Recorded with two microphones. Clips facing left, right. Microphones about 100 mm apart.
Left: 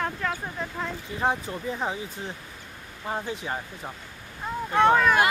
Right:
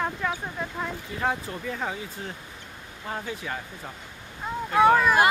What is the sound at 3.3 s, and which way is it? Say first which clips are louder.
Speech: left 2 dB; 20° left (ahead or behind).